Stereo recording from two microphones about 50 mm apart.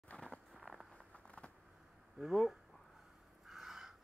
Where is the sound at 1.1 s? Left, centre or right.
Left.